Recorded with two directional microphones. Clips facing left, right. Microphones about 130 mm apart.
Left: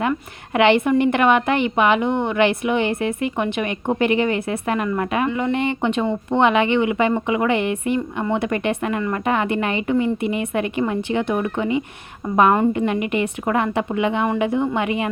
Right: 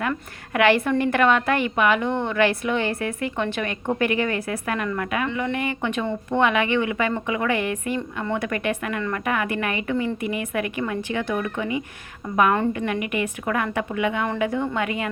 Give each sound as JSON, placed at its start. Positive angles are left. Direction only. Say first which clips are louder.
{"t": 0.0, "sound": "a woman's voice", "louder": "left 4 dB", "side_deg": 25}